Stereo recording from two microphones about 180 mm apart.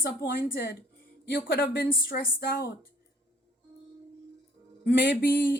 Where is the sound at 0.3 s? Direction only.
55° left (ahead or behind).